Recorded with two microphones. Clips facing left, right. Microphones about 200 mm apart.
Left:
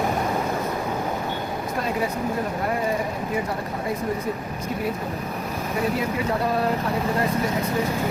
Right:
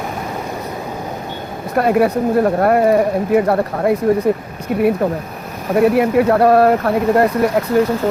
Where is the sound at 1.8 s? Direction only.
65° right (ahead or behind).